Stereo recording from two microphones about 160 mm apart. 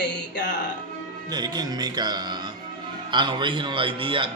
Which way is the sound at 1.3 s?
25° right (ahead or behind).